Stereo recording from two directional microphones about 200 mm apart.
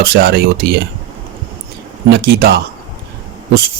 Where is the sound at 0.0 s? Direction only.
50° right (ahead or behind).